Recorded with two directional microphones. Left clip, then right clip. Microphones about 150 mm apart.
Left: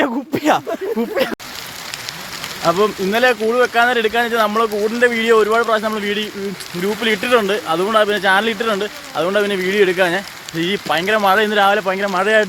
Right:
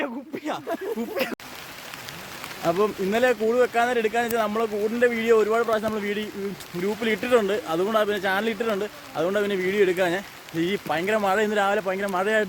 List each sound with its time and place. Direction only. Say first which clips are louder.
0.0 s a sound: left 13 dB; 90° left
1.1 s speech: left 8 dB; 35° left (ahead or behind)
2.6 s speech: left 7 dB; 10° right (ahead or behind)
3.1 s speech: left 6 dB; 20° right (ahead or behind)